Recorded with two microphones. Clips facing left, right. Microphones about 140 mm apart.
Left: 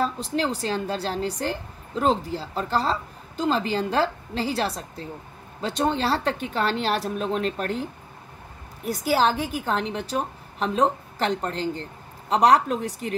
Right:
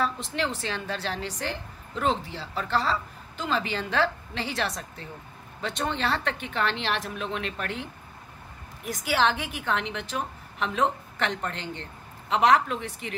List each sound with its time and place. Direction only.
0.0 s speech: 35° left (ahead or behind)